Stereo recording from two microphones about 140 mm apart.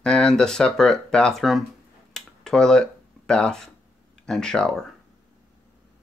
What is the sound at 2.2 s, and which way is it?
Finger snapping, 5° left (ahead or behind).